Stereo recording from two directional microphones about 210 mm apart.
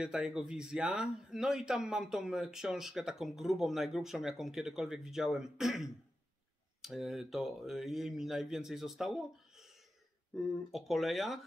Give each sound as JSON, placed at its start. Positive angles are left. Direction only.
{"t": 0.0, "sound": "a man's voice", "side_deg": -5}